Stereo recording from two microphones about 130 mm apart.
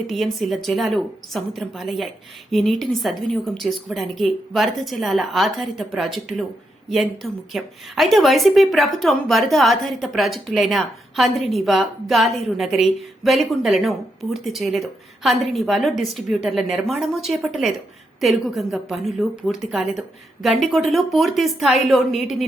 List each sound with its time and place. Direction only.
0.1 s a woman's voice: centre (ahead or behind)